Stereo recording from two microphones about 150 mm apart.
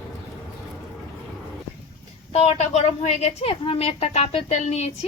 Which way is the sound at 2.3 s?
45° left (ahead or behind).